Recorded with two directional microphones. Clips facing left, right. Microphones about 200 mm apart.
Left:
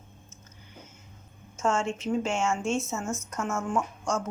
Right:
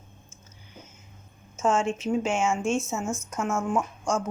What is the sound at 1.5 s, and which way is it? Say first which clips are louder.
Speech: right 3 dB; 15° right (ahead or behind).